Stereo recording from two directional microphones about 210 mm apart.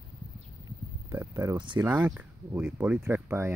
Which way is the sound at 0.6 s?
15° right (ahead or behind).